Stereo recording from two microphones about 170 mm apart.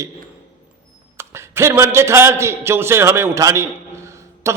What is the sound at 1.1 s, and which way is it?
A man's voice, 15° right (ahead or behind).